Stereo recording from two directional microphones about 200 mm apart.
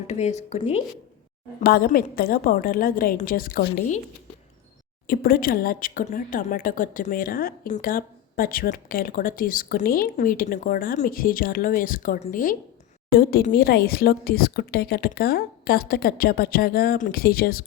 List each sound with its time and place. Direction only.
0.1 s speech: 35° left (ahead or behind)
1.6 s speech: 50° left (ahead or behind)
3.7 s speech: 35° left (ahead or behind)
5.0 s speech: 50° left (ahead or behind)